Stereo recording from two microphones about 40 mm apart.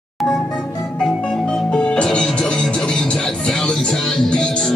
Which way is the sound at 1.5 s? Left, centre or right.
Centre.